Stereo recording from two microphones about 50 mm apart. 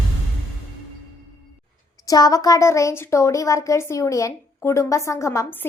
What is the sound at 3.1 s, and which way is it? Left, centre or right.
A woman's voice, left.